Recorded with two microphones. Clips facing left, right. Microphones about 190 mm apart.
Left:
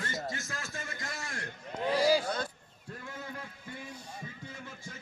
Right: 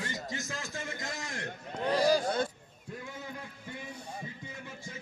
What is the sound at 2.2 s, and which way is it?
Speech, 25° right (ahead or behind).